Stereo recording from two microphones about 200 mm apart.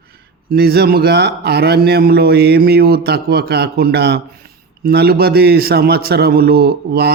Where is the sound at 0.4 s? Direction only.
50° right (ahead or behind).